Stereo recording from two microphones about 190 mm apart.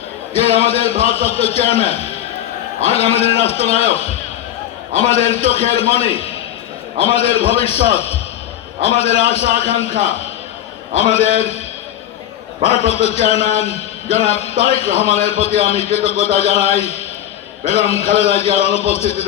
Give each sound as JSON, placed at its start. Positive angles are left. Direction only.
{"t": 0.3, "sound": "a man's voice", "side_deg": 30}
{"t": 12.6, "sound": "a man's voice", "side_deg": 35}